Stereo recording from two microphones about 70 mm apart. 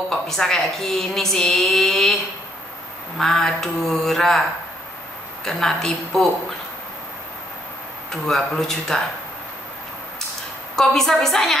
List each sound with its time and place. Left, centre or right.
0.1 s a woman's voice: centre
3.2 s a woman's voice: centre
5.4 s a woman's voice: centre
8.1 s a woman's voice: centre
10.8 s a woman's voice: centre